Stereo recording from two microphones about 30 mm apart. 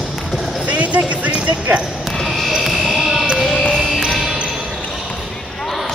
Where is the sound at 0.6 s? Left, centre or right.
Right.